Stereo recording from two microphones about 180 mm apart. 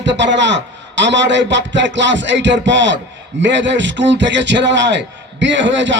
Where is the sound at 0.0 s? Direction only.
80° right.